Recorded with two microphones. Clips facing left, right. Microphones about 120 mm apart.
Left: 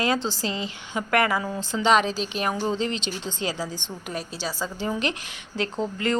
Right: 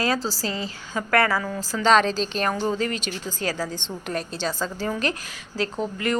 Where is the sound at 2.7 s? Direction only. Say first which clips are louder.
Right 1 dB; 25° left (ahead or behind).